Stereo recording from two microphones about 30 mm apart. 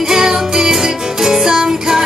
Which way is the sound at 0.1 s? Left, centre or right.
Centre.